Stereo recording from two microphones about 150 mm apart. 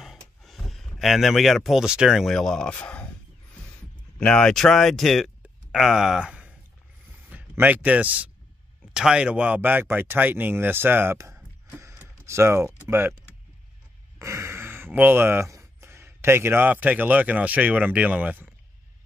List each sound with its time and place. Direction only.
0.0 s speech: centre (ahead or behind)
4.2 s speech: 5° left (ahead or behind); by 13.2 s 15° right (ahead or behind)
14.2 s speech: 20° right (ahead or behind)